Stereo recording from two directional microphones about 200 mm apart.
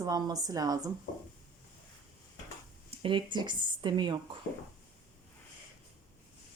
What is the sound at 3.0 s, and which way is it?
Speech, 25° right (ahead or behind).